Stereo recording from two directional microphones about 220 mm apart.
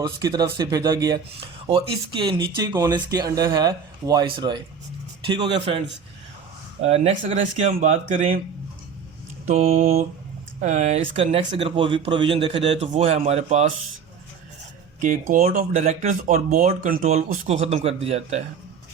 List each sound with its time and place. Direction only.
0.0 s speech: 20° right (ahead or behind)
6.8 s speech: 30° right (ahead or behind)
9.5 s speech: 30° right (ahead or behind)
15.0 s speech: 35° right (ahead or behind)